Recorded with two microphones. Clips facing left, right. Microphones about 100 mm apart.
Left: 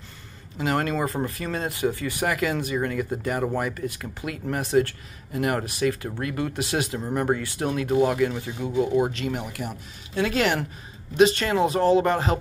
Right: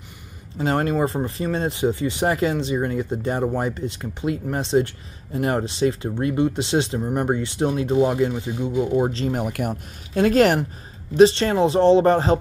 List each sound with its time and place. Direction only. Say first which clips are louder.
0.6 s speech: right 4 dB; 25° right (ahead or behind)
9.4 s speech: right 7 dB; 55° right (ahead or behind)
11.1 s speech: right 4 dB; 30° right (ahead or behind)